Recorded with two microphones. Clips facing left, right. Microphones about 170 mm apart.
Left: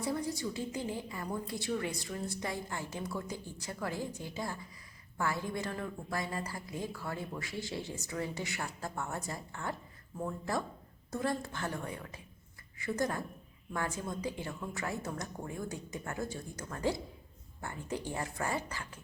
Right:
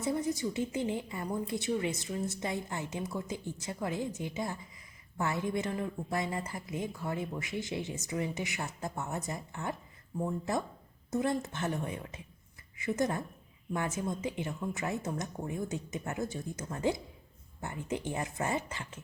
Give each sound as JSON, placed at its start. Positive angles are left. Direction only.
{"t": 0.0, "sound": "a woman's voice", "side_deg": -20}